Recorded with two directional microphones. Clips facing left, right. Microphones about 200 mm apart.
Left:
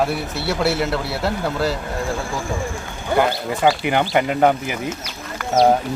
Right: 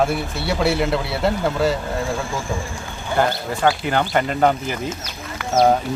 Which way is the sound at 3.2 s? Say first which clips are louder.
Left 1 dB; 15° left (ahead or behind).